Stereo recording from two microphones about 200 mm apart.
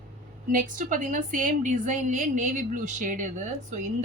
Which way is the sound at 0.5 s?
40° right (ahead or behind).